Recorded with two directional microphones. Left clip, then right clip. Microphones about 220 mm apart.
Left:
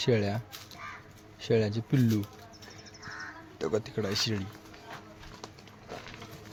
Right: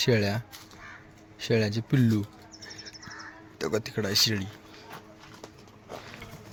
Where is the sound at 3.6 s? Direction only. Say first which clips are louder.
Right 2 dB; 5° right (ahead or behind).